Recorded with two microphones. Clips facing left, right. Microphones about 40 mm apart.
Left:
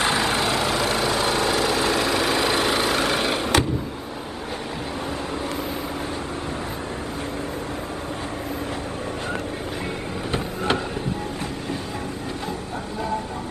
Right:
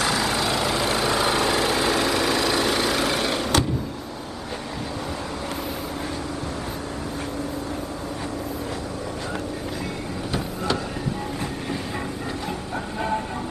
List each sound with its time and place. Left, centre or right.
0.0 s vehicle: left
0.6 s vehicle: centre
1.0 s vehicle: centre
2.0 s vehicle: centre
10.3 s vehicle: left